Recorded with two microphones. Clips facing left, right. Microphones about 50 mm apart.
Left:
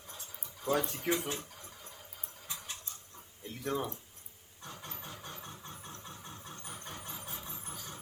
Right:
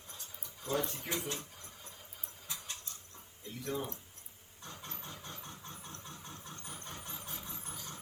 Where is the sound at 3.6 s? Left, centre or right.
Left.